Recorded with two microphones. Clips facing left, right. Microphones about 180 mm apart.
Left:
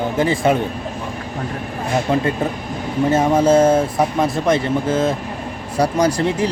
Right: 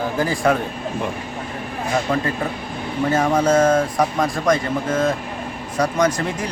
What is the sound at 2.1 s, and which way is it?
Speech, 25° left (ahead or behind).